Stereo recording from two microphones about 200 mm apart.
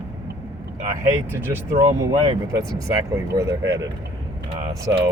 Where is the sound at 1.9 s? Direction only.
25° right (ahead or behind).